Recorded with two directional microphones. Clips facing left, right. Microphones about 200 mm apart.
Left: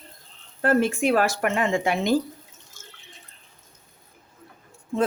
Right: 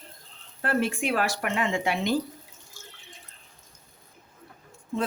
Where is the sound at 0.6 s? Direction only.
45° left (ahead or behind).